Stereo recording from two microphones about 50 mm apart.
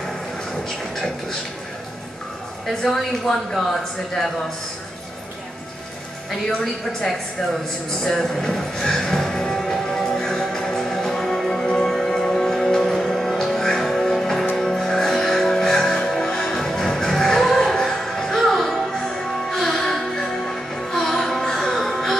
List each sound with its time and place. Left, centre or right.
2.8 s speech: centre
6.6 s a woman's voice: centre
8.0 s music: centre